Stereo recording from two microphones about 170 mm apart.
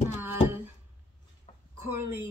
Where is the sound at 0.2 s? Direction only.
15° right (ahead or behind).